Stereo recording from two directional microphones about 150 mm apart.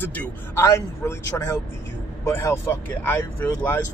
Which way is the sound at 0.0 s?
10° left (ahead or behind).